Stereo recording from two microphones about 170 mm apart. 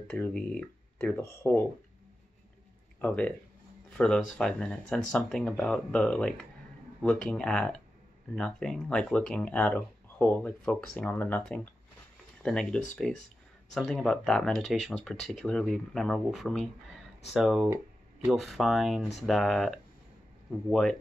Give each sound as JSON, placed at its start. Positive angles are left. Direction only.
{"t": 0.1, "sound": "speech", "side_deg": 5}
{"t": 3.0, "sound": "speech", "side_deg": 5}